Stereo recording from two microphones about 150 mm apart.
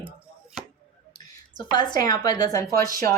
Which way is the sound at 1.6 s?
30° left (ahead or behind).